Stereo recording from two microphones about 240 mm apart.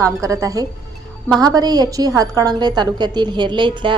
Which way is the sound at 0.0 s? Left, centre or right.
Centre.